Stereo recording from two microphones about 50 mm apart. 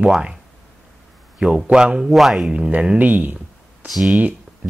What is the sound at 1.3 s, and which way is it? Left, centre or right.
Speech, right.